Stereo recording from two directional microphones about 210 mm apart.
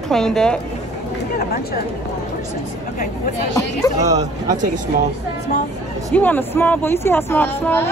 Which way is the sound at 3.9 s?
15° right (ahead or behind).